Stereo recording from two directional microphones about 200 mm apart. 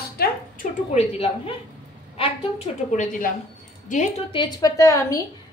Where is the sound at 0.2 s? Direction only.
50° left (ahead or behind).